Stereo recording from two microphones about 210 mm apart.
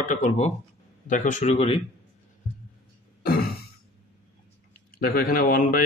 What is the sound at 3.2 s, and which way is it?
Throat clearing, 45° left (ahead or behind).